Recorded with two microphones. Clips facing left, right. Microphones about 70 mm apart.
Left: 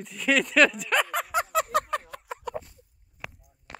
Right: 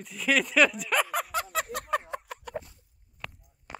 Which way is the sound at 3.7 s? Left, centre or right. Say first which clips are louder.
Right 2 dB; centre.